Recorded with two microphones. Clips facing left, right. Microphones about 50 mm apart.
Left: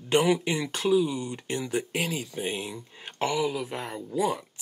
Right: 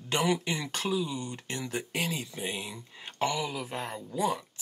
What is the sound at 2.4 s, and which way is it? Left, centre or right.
Speech, left.